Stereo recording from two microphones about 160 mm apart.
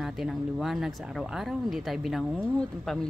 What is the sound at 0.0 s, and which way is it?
Speech, centre (ahead or behind).